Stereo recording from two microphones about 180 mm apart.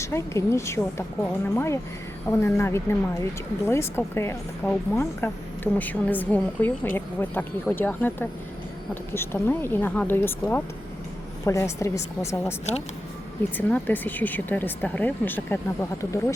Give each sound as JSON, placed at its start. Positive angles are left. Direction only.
{"t": 0.0, "sound": "speech", "side_deg": 15}
{"t": 13.6, "sound": "speech", "side_deg": 10}